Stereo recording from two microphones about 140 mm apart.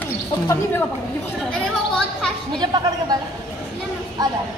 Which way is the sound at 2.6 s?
30° right (ahead or behind).